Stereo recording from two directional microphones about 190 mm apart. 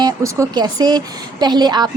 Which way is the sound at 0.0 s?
20° right (ahead or behind).